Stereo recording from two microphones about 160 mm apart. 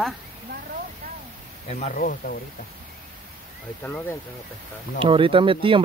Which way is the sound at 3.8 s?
10° left (ahead or behind).